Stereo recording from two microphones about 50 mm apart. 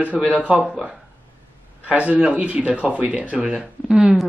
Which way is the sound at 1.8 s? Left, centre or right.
Right.